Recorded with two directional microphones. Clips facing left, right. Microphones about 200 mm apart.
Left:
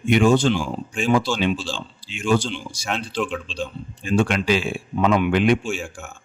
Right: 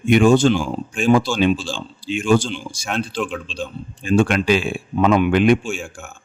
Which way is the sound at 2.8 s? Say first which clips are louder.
Right 2 dB; centre (ahead or behind).